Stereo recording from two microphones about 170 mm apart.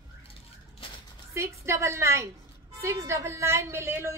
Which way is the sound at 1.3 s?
15° right (ahead or behind).